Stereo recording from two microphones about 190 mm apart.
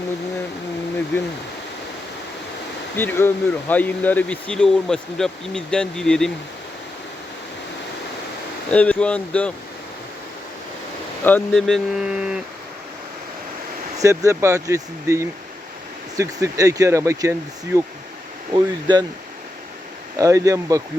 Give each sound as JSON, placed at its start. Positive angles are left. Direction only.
{"t": 2.9, "sound": "speech", "side_deg": 10}
{"t": 8.7, "sound": "speech", "side_deg": 5}
{"t": 11.2, "sound": "speech", "side_deg": 10}
{"t": 14.3, "sound": "speech", "side_deg": -15}
{"t": 20.1, "sound": "speech", "side_deg": -15}